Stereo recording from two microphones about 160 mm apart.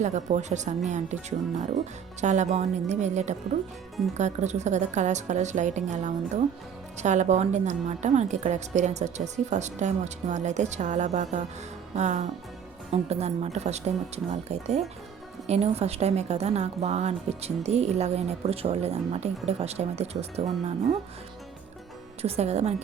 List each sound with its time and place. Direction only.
0.0 s a woman's voice: 50° right (ahead or behind)
22.2 s a woman's voice: 40° right (ahead or behind)